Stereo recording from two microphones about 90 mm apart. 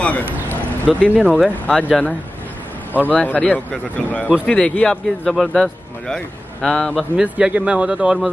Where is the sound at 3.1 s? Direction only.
15° left (ahead or behind).